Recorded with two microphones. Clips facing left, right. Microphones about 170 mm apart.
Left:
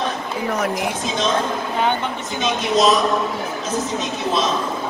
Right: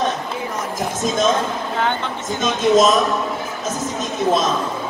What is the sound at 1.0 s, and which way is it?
Speech, 45° right (ahead or behind).